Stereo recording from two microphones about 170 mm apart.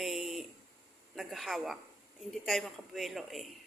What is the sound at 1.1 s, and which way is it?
Speech, centre (ahead or behind).